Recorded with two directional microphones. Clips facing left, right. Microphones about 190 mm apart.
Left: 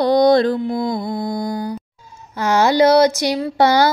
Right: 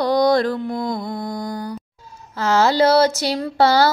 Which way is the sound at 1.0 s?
25° left (ahead or behind).